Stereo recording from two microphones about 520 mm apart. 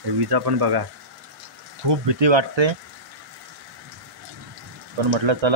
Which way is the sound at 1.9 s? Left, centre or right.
Right.